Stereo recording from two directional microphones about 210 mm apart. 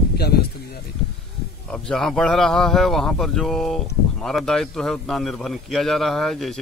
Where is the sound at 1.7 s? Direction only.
5° left (ahead or behind).